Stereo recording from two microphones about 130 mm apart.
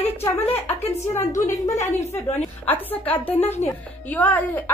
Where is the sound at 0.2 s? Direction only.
20° left (ahead or behind).